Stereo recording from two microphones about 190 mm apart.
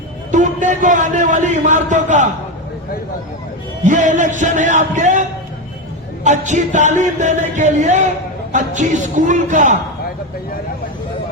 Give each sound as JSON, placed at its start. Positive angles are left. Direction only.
{"t": 0.3, "sound": "a man's voice", "side_deg": -40}
{"t": 3.8, "sound": "a man's voice", "side_deg": -40}
{"t": 6.2, "sound": "a man's voice", "side_deg": -40}